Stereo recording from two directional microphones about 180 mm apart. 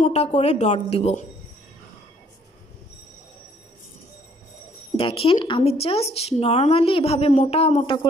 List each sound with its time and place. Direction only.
0.0 s a woman's voice: 35° left (ahead or behind)
4.9 s a woman's voice: 30° left (ahead or behind)